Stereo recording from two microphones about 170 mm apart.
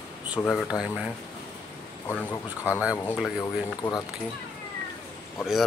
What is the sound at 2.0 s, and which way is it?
Speech, 15° left (ahead or behind).